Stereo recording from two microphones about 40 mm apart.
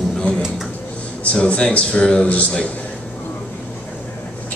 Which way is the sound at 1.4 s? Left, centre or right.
Left.